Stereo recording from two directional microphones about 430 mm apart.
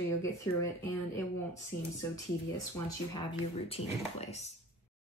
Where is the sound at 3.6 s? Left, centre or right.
Centre.